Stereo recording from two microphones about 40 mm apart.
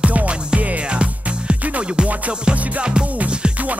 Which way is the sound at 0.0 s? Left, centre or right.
Right.